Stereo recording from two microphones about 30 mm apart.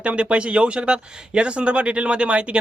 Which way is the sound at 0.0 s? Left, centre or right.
Right.